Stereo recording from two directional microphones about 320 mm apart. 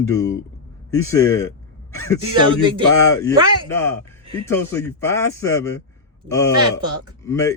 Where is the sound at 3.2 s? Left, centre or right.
Centre.